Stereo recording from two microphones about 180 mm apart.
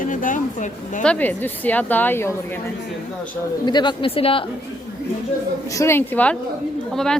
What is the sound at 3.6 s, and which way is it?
Speech, 25° left (ahead or behind).